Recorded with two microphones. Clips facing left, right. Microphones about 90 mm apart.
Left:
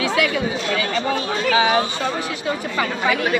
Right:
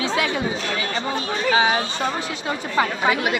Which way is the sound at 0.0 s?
25° right (ahead or behind).